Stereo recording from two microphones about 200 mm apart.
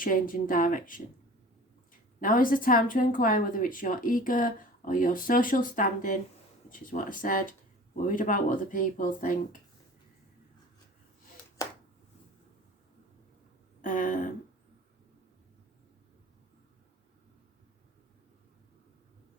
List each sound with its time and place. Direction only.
0.0 s a woman's voice: 45° left (ahead or behind)
2.2 s a woman's voice: 45° left (ahead or behind)
13.8 s a sound: 40° left (ahead or behind)